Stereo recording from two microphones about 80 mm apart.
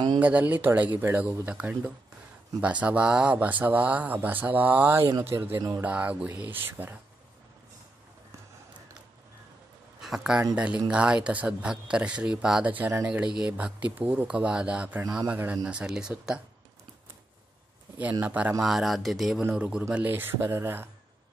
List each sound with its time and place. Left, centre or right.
0.2 s speech: centre
9.9 s speech: centre
18.2 s speech: centre
18.6 s speech: centre
19.5 s speech: centre; by 20.9 s right